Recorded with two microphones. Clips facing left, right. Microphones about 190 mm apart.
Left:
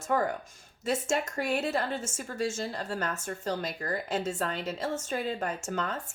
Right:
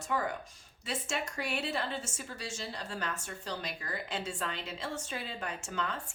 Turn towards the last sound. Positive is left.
turn(degrees=45)  # may be behind; listen again after turning